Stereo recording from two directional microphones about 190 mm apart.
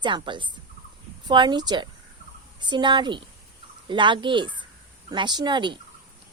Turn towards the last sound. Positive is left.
turn(degrees=-25)  # may be behind; listen again after turning